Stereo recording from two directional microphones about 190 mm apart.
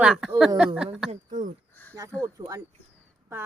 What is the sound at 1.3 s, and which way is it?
Speech, 45° right (ahead or behind).